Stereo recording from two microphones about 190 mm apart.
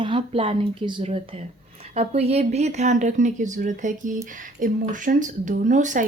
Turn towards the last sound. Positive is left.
turn(degrees=-40)  # may be behind; listen again after turning